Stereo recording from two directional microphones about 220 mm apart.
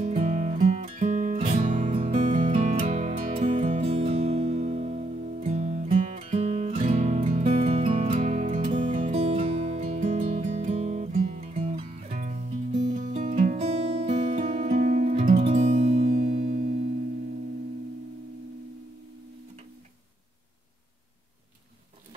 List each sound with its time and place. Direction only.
0.1 s music: 30° right (ahead or behind)
16.1 s music: 40° right (ahead or behind)